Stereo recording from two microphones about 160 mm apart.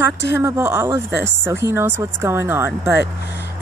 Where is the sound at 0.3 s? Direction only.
15° right (ahead or behind).